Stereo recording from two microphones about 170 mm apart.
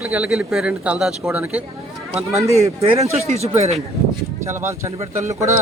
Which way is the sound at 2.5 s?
35° right (ahead or behind).